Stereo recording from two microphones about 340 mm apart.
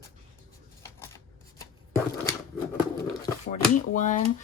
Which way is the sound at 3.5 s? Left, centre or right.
Left.